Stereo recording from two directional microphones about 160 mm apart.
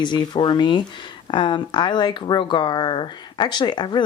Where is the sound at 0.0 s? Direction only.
30° left (ahead or behind).